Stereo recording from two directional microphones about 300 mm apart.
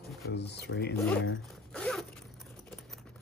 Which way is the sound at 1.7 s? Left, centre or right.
Centre.